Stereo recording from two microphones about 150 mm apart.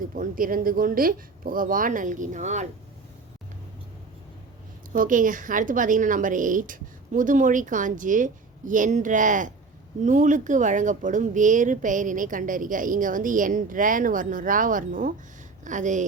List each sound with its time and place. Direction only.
0.2 s speech: 70° right (ahead or behind); by 2.6 s 50° right (ahead or behind)
4.9 s speech: 60° right (ahead or behind)